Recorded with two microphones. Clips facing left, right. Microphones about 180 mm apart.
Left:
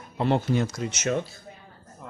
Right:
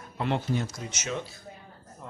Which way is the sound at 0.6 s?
75° left (ahead or behind).